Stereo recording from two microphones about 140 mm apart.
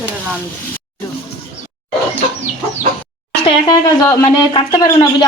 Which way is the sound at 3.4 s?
25° left (ahead or behind).